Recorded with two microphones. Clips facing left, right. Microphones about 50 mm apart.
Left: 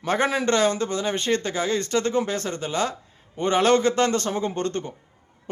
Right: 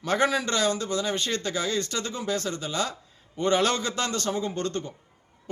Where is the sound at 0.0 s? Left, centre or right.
Left.